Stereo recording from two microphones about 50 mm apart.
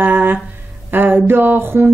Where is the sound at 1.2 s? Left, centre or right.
Right.